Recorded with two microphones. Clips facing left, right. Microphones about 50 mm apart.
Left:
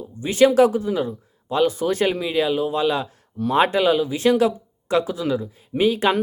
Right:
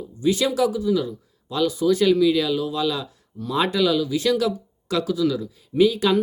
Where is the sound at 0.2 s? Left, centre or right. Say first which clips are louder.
Left 5 dB; left.